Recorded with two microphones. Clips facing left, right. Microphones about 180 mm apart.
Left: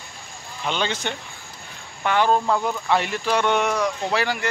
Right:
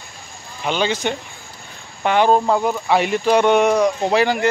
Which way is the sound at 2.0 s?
20° right (ahead or behind).